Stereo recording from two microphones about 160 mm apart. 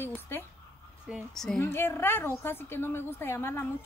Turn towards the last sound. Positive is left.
turn(degrees=15)  # may be behind; listen again after turning